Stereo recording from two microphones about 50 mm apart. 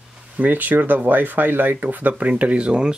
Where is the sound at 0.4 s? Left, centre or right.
Right.